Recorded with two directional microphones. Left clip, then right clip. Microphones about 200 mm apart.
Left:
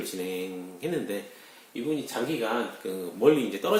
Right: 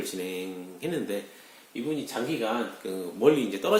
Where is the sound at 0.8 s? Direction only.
20° right (ahead or behind).